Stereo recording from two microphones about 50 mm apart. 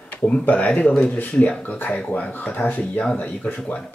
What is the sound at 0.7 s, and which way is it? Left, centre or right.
Speech, centre.